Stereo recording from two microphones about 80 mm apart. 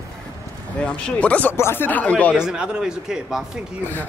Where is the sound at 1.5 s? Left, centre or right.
Left.